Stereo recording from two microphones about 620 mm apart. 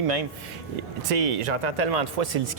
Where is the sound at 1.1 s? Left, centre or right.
Right.